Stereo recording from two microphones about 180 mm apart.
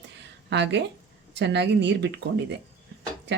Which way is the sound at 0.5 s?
75° right (ahead or behind).